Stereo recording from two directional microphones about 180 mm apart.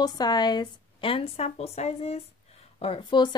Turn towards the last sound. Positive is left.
turn(degrees=30)  # may be behind; listen again after turning